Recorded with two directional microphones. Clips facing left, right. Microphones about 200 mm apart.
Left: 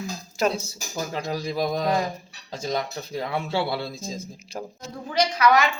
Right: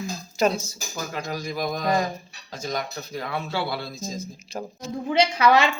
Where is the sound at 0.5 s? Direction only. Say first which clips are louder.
Left 1 dB; 30° left (ahead or behind).